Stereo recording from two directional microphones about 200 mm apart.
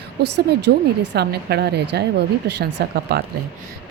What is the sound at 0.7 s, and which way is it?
A woman's voice, 55° right (ahead or behind).